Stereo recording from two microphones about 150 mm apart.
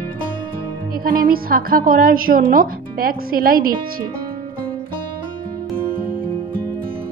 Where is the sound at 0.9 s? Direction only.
75° right (ahead or behind).